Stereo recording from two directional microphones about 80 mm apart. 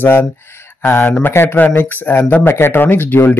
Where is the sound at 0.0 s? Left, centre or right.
Left.